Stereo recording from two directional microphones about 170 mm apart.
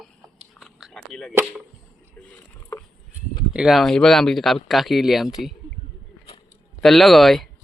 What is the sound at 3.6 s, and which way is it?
Speech, centre (ahead or behind).